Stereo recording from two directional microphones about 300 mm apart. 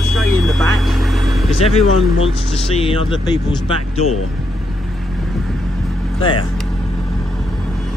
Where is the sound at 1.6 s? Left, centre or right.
Centre.